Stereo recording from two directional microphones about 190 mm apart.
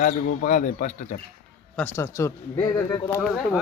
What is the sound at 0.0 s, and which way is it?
Speech, 40° left (ahead or behind).